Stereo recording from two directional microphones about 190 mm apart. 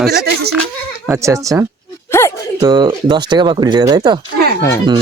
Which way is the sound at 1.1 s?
15° right (ahead or behind).